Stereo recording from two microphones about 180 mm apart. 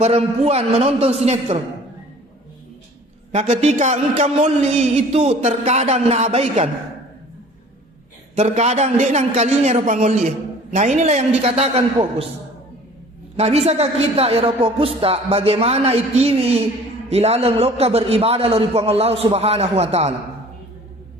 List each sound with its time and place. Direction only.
0.0 s a man's voice: 35° right (ahead or behind)
3.3 s a man's voice: 40° right (ahead or behind)
8.4 s a man's voice: 35° right (ahead or behind)
13.3 s a man's voice: 35° right (ahead or behind)